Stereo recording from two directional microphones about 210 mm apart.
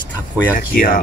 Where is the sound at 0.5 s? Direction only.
40° left (ahead or behind).